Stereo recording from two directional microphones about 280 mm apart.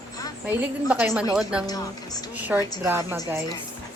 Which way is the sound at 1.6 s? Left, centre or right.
Centre.